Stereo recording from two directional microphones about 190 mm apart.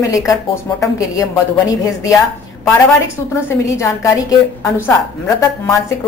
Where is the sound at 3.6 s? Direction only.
15° left (ahead or behind).